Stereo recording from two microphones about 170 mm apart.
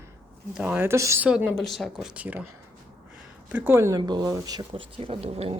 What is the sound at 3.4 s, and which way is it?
Speech, 10° right (ahead or behind).